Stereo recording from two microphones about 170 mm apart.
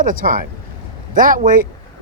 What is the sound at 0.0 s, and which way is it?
Speech, 50° right (ahead or behind).